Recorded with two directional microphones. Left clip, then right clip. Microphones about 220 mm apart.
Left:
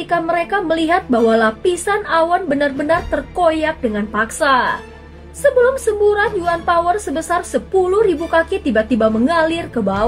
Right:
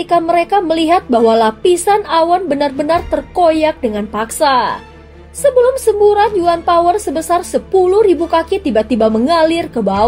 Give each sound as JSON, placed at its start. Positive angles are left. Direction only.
{"t": 0.0, "sound": "a woman's voice", "side_deg": -25}